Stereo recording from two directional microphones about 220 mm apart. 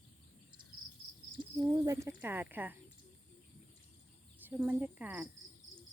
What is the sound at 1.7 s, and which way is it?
Speech, 15° right (ahead or behind).